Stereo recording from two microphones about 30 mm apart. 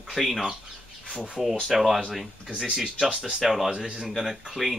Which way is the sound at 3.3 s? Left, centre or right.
Centre.